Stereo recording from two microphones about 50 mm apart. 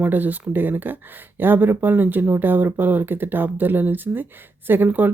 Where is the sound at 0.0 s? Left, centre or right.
Right.